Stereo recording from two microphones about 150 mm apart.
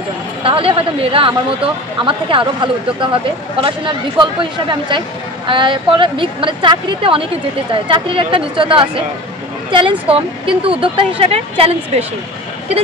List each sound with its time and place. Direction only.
0.4 s a woman's voice: 35° right (ahead or behind)